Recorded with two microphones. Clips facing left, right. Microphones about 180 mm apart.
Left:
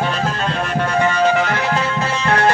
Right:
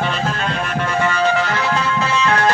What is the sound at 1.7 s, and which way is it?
Music, 25° left (ahead or behind).